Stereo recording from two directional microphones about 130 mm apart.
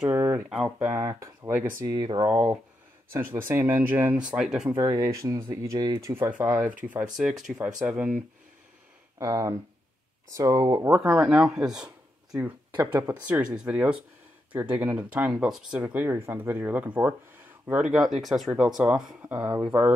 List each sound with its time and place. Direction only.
0.0 s a sound: 20° right (ahead or behind)
0.7 s speech: 20° right (ahead or behind)
2.2 s speech: 15° right (ahead or behind)
4.7 s speech: 30° right (ahead or behind)
6.8 s speech: 15° right (ahead or behind)
9.2 s speech: 25° right (ahead or behind)
10.9 s speech: 15° right (ahead or behind)
11.3 s speech: 5° right (ahead or behind)
12.7 s speech: 20° right (ahead or behind)
15.8 s speech: 15° right (ahead or behind)